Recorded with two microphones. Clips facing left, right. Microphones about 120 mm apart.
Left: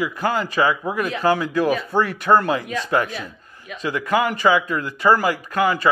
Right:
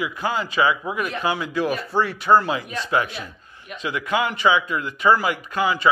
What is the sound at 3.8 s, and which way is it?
A man's voice, 35° left (ahead or behind).